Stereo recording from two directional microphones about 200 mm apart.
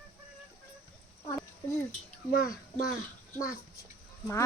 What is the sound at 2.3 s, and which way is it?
Speech, 45° left (ahead or behind).